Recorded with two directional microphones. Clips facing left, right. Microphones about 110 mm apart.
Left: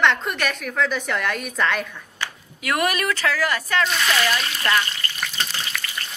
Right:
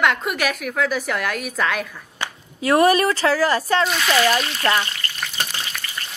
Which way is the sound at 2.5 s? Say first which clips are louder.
Right 7 dB; 30° right (ahead or behind).